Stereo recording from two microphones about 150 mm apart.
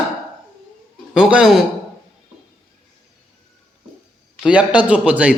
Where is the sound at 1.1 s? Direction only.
5° right (ahead or behind).